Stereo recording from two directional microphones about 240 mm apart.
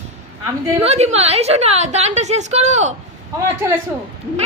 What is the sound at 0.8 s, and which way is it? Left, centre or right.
A woman's voice, right.